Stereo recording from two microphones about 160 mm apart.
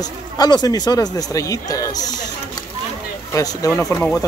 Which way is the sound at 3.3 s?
20° left (ahead or behind).